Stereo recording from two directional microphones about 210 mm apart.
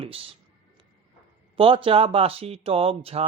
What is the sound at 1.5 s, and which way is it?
Speech, 25° right (ahead or behind).